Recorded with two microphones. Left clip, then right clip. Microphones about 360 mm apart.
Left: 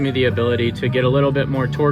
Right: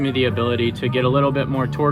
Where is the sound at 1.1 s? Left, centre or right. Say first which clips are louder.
Even; right.